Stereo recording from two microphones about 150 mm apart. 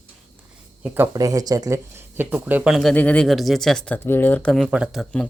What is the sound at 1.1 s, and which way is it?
Speech, 25° right (ahead or behind).